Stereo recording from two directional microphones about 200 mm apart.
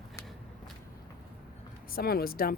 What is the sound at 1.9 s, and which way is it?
Speech, 50° left (ahead or behind).